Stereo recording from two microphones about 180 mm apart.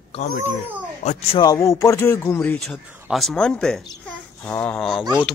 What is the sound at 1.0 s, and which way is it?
Speech, 40° left (ahead or behind).